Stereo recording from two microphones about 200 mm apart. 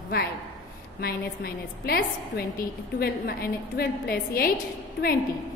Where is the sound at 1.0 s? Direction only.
50° left (ahead or behind).